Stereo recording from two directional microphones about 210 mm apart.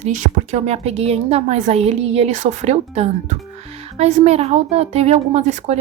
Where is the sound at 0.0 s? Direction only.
35° right (ahead or behind).